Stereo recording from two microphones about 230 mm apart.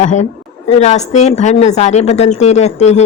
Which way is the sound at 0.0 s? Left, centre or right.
Left.